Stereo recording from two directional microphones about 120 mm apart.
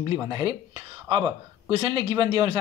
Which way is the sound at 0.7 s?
40° right (ahead or behind).